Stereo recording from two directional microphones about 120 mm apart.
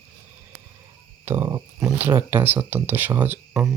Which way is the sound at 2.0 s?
20° right (ahead or behind).